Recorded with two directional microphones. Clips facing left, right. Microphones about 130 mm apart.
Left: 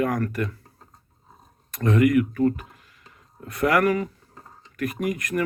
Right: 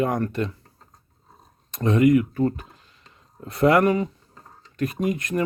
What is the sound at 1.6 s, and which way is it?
Speech, 25° right (ahead or behind).